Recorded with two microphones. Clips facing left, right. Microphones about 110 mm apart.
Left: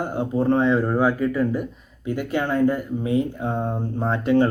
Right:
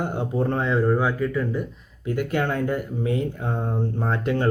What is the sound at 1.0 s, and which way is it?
Speech, 15° left (ahead or behind).